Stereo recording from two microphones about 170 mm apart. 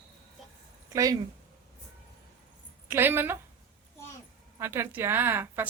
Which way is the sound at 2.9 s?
10° right (ahead or behind).